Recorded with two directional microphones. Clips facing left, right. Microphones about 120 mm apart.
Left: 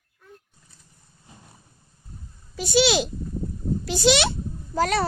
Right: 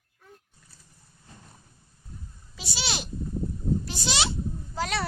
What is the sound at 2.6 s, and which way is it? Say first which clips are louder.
Speech: left 19 dB; 50° left (ahead or behind).